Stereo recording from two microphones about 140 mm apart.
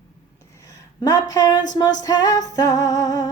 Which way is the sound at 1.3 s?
30° left (ahead or behind).